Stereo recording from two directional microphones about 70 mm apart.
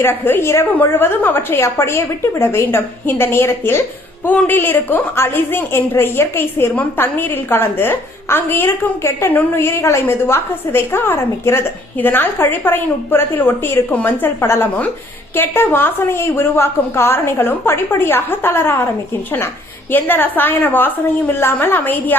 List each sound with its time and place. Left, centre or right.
0.0 s a woman's voice: left
4.3 s a woman's voice: left
19.9 s a woman's voice: left